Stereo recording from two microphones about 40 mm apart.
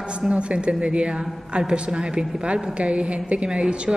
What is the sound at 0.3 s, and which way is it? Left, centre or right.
A woman's voice, right.